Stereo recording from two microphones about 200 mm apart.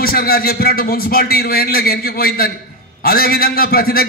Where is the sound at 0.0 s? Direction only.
50° left (ahead or behind).